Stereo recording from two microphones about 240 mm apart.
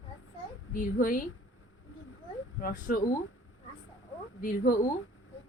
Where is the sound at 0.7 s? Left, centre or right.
Left.